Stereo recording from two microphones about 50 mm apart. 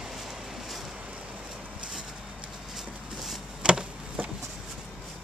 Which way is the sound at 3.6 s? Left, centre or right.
Centre.